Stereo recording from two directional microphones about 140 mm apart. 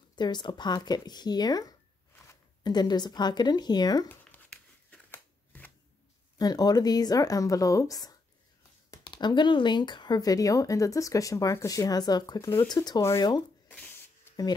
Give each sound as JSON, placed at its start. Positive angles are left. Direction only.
{"t": 0.1, "sound": "speech", "side_deg": 30}
{"t": 4.1, "sound": "a sound", "side_deg": 10}
{"t": 6.3, "sound": "speech", "side_deg": 30}
{"t": 13.7, "sound": "spray", "side_deg": 15}